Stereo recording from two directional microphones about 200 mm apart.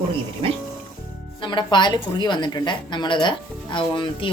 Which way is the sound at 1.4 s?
25° left (ahead or behind).